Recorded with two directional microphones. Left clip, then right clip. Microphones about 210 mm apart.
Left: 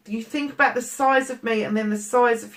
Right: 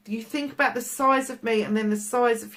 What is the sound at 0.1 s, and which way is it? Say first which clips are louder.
Speech: left 3 dB; 45° right (ahead or behind).